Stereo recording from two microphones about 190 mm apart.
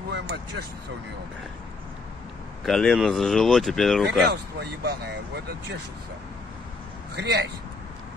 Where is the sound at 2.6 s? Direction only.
Centre (ahead or behind).